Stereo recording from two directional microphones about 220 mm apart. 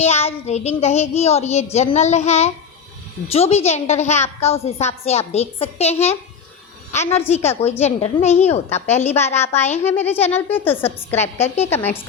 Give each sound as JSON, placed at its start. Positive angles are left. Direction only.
{"t": 0.0, "sound": "a woman's voice", "side_deg": 30}
{"t": 9.8, "sound": "a woman's voice", "side_deg": 10}
{"t": 11.4, "sound": "a woman's voice", "side_deg": 30}
{"t": 11.7, "sound": "a woman's voice", "side_deg": 10}